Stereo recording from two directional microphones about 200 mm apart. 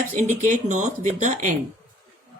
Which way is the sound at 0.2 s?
40° right (ahead or behind).